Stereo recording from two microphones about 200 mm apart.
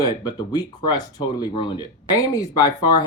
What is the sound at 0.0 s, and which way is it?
Speech, 20° left (ahead or behind).